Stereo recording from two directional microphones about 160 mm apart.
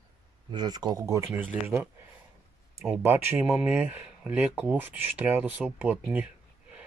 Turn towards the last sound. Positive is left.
turn(degrees=-10)  # may be behind; listen again after turning